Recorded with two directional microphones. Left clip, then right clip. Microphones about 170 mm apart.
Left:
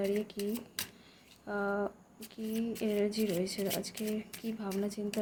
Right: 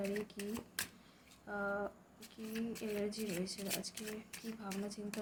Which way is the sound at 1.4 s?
40° left (ahead or behind).